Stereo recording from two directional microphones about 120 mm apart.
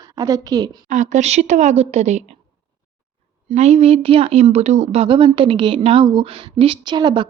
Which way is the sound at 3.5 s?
65° right (ahead or behind).